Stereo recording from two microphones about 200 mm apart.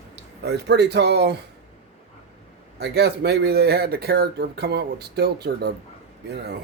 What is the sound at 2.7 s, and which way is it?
Speech, 55° right (ahead or behind).